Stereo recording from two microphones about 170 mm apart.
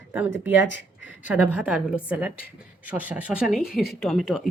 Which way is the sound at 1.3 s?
5° right (ahead or behind).